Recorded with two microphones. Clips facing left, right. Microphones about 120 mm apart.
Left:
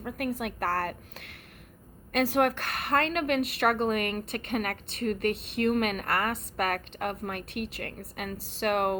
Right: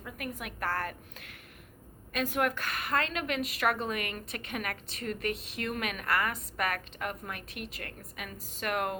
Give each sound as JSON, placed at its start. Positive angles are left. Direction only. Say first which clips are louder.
{"t": 0.0, "sound": "a woman's voice", "louder": "left 8 dB", "side_deg": 65}
{"t": 0.6, "sound": "a woman's voice", "louder": "left 3 dB", "side_deg": 35}
{"t": 2.1, "sound": "a woman's voice", "louder": "left 6 dB", "side_deg": 75}
{"t": 2.6, "sound": "a woman's voice", "louder": "left 4 dB", "side_deg": 60}
{"t": 6.1, "sound": "a woman's voice", "louder": "left 2 dB", "side_deg": 30}
{"t": 8.4, "sound": "a woman's voice", "louder": "left 3 dB", "side_deg": 80}
{"t": 8.6, "sound": "a woman's voice", "louder": "left 6 dB", "side_deg": 50}